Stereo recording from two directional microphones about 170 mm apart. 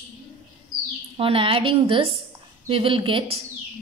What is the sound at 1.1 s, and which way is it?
A woman's voice, 35° right (ahead or behind).